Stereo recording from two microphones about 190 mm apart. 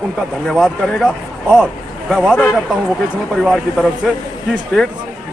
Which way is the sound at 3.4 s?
5° right (ahead or behind).